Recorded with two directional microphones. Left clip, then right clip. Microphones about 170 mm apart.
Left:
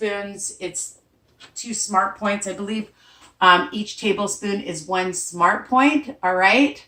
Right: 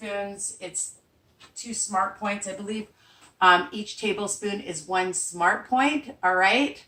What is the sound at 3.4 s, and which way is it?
Speech, 15° right (ahead or behind).